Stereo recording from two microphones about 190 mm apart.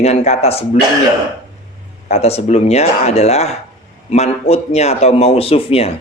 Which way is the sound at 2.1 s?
35° left (ahead or behind).